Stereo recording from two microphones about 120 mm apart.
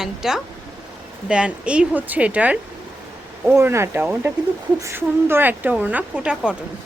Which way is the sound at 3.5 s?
20° right (ahead or behind).